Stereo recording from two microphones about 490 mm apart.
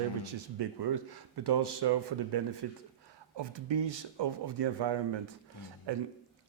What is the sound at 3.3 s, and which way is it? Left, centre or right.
Speech, right.